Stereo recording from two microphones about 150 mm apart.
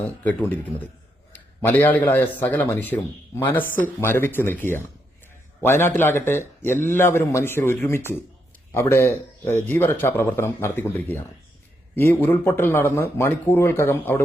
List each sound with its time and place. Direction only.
0.3 s a man's voice: 10° left (ahead or behind)